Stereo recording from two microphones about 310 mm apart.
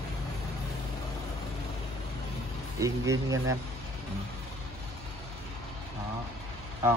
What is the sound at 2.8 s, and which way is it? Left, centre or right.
Speech, centre.